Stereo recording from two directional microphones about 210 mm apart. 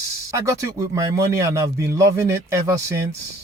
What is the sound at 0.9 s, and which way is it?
A man's voice, 15° right (ahead or behind).